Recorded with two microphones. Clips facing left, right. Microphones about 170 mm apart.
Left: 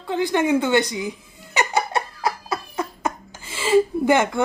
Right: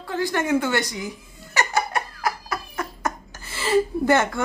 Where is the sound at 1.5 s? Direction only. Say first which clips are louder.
Left 2 dB; 20° left (ahead or behind).